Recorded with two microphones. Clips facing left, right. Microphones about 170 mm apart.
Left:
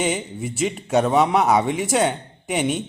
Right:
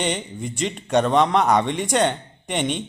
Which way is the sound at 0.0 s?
5° left (ahead or behind).